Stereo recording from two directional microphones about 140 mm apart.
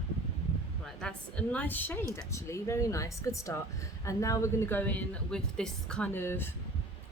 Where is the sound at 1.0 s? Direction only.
5° left (ahead or behind).